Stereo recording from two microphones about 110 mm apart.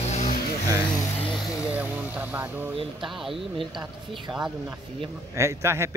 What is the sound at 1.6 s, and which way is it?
Speech, 15° right (ahead or behind).